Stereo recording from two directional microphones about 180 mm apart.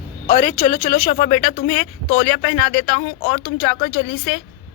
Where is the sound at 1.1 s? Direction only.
40° left (ahead or behind).